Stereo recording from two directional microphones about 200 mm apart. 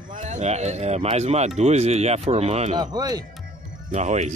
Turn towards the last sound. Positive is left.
turn(degrees=-35)  # may be behind; listen again after turning